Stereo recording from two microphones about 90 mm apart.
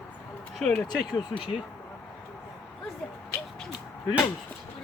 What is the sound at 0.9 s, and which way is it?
Speech, 50° left (ahead or behind).